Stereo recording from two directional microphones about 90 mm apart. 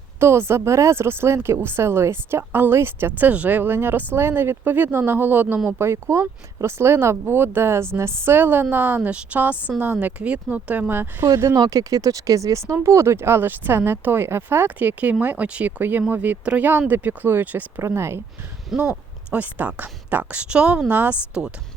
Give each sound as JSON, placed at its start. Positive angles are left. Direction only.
{"t": 0.2, "sound": "speech", "side_deg": -30}
{"t": 11.3, "sound": "speech", "side_deg": -35}
{"t": 17.8, "sound": "speech", "side_deg": -30}
{"t": 18.7, "sound": "speech", "side_deg": -10}